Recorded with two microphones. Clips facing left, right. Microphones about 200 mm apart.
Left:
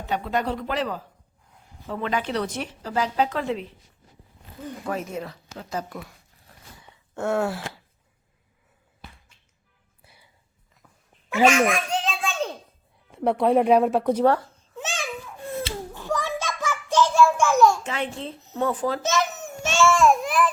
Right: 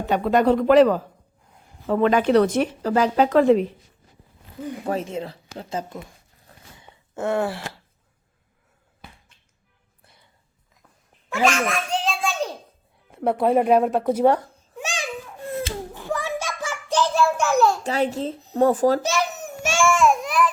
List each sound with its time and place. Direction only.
0.0 s speech: 55° right (ahead or behind)
4.8 s speech: 30° right (ahead or behind)
7.1 s speech: centre (ahead or behind)
10.0 s music: 5° left (ahead or behind)
11.3 s a sound: 10° left (ahead or behind)
13.1 s speech: centre (ahead or behind)
14.3 s babbling: 15° right (ahead or behind)
16.0 s a sound: 15° right (ahead or behind)
17.2 s a sound: 40° right (ahead or behind)
18.5 s speech: 40° right (ahead or behind)
19.0 s a sound: 15° right (ahead or behind)
20.1 s babbling: centre (ahead or behind)